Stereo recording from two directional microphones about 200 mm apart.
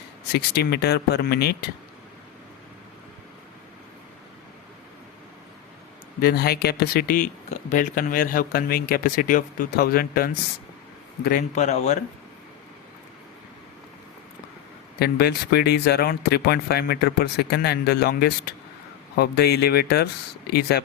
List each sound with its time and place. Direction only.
0.3 s speech: 55° left (ahead or behind)
6.1 s speech: 50° left (ahead or behind)
14.9 s speech: 50° left (ahead or behind)